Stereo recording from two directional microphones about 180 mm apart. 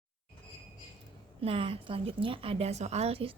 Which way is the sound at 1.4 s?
30° right (ahead or behind).